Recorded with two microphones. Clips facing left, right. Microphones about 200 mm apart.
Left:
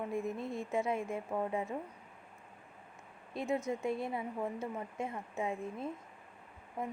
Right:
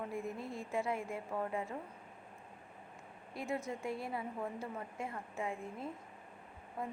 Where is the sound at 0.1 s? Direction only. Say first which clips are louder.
Left 4 dB; 20° left (ahead or behind).